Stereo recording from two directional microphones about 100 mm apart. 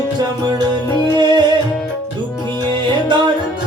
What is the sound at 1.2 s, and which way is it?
Music, 50° right (ahead or behind).